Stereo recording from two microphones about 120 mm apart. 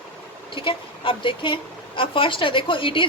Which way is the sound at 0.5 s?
45° left (ahead or behind).